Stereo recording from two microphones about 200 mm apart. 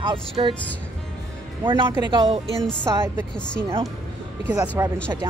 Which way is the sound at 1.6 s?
25° right (ahead or behind).